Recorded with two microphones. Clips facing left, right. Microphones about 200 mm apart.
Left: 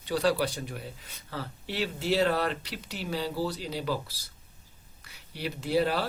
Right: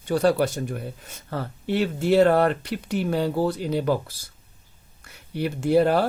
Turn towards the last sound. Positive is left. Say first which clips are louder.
# right 8 dB
turn(degrees=-50)  # may be behind; listen again after turning